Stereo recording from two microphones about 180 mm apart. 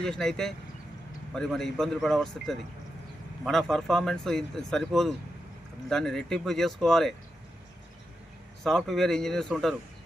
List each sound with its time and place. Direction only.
0.0 s speech: 5° left (ahead or behind)
8.6 s speech: centre (ahead or behind)